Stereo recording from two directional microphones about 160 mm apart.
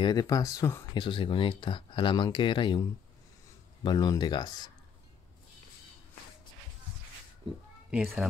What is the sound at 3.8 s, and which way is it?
Speech, 25° left (ahead or behind).